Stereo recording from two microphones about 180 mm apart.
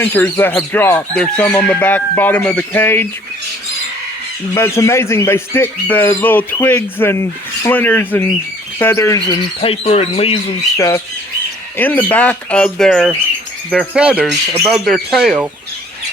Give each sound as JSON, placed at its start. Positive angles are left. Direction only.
{"t": 0.0, "sound": "speech", "side_deg": 10}
{"t": 4.5, "sound": "speech", "side_deg": 15}
{"t": 9.6, "sound": "speech", "side_deg": 35}
{"t": 10.8, "sound": "speech", "side_deg": 15}